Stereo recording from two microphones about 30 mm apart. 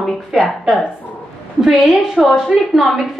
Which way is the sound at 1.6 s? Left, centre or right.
Centre.